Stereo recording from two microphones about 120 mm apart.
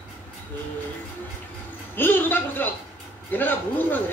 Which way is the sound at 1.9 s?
15° left (ahead or behind).